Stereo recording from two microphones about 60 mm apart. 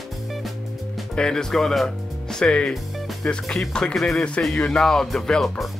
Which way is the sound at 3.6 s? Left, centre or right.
Centre.